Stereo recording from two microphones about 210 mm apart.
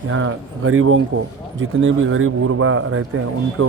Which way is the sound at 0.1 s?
75° right (ahead or behind).